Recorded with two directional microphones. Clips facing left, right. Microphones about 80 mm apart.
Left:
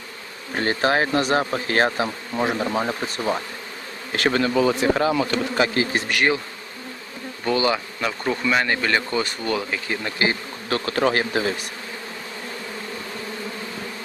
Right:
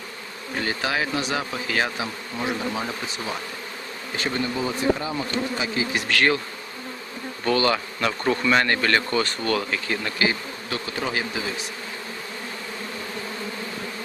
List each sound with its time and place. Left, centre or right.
0.5 s speech: left
4.1 s speech: left
6.1 s bee: centre
7.4 s speech: centre
8.0 s speech: centre
10.7 s speech: left